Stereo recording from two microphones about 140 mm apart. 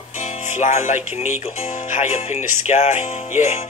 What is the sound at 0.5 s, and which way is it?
Speech, 60° left (ahead or behind).